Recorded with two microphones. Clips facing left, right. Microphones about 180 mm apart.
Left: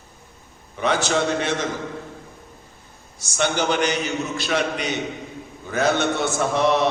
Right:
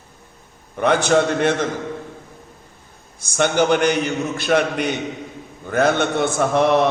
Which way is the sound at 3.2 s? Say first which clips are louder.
Right 5 dB; 55° right (ahead or behind).